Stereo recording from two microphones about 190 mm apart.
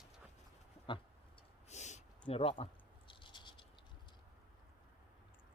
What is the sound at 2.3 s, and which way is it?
Speech, 30° left (ahead or behind).